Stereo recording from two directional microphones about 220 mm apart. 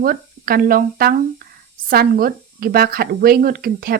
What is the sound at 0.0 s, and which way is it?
Speech, 40° right (ahead or behind).